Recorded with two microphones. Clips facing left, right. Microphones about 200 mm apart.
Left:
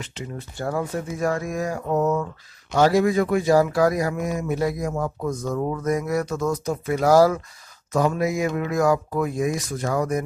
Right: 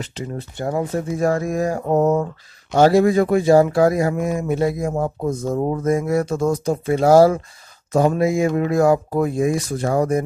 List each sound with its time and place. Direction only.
0.2 s speech: 35° right (ahead or behind)
0.6 s speech: 20° right (ahead or behind)